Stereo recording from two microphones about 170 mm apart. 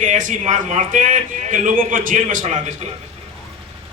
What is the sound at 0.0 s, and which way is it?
A man's voice, 45° right (ahead or behind).